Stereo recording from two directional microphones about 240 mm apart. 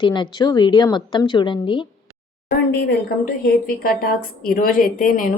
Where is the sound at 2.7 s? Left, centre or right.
Left.